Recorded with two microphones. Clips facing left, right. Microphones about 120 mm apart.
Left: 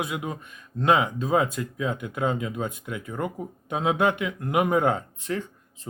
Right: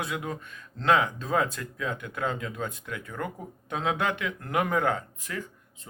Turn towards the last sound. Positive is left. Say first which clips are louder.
# left 3 dB
turn(degrees=30)  # may be behind; listen again after turning